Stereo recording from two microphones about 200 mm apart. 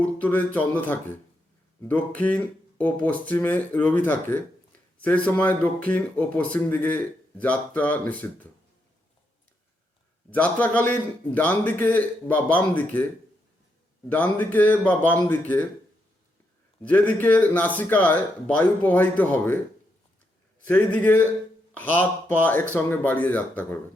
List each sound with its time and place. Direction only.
0.0 s speech: 10° left (ahead or behind)
10.3 s speech: 5° left (ahead or behind)
14.1 s speech: 10° left (ahead or behind)
16.8 s speech: 5° left (ahead or behind)
20.7 s speech: 10° left (ahead or behind)